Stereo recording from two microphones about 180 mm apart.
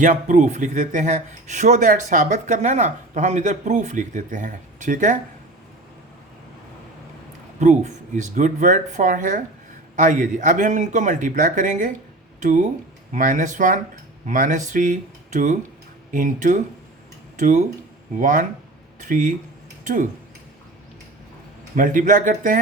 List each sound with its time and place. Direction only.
0.0 s speech: 45° right (ahead or behind)
7.6 s speech: 40° right (ahead or behind)
21.8 s speech: 45° right (ahead or behind)